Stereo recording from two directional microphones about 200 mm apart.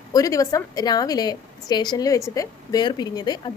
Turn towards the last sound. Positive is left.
turn(degrees=20)  # may be behind; listen again after turning